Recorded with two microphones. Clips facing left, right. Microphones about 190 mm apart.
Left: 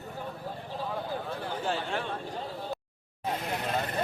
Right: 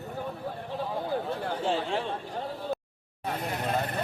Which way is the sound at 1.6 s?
30° right (ahead or behind).